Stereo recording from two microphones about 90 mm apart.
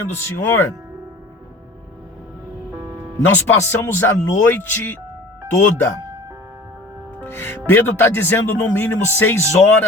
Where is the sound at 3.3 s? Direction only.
25° left (ahead or behind).